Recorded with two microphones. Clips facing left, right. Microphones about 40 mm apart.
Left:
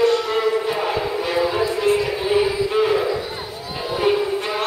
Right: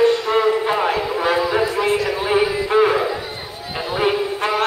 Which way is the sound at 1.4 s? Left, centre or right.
Centre.